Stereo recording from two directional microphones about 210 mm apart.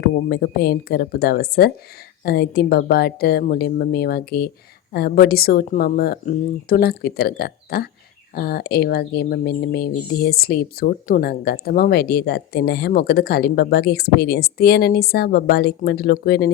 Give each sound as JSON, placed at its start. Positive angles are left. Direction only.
{"t": 0.0, "sound": "speech", "side_deg": 50}